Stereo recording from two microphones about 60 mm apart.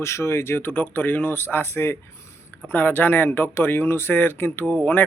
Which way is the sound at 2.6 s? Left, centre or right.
Left.